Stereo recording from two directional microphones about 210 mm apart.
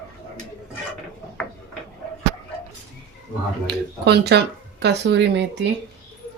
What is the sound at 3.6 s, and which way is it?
Speech, 50° right (ahead or behind).